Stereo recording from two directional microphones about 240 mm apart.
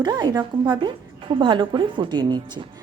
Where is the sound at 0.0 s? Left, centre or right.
Centre.